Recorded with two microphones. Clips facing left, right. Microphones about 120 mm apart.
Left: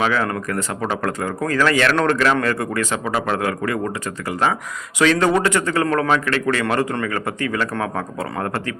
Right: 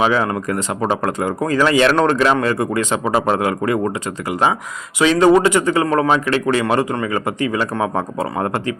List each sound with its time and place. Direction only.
0.0 s a man's voice: 20° right (ahead or behind)